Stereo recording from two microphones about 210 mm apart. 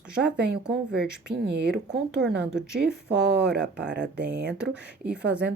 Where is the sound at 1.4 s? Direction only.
55° right (ahead or behind).